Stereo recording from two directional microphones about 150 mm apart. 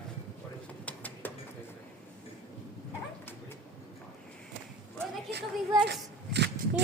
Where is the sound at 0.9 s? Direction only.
10° left (ahead or behind).